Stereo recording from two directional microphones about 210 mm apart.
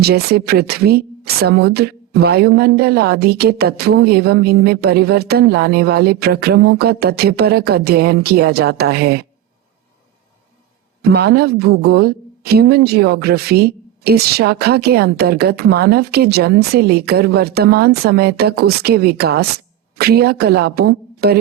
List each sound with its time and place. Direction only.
0.0 s a woman's voice: 50° right (ahead or behind)
11.0 s a woman's voice: 50° right (ahead or behind)